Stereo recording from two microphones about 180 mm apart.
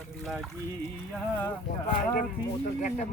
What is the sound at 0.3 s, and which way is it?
Speech, centre (ahead or behind).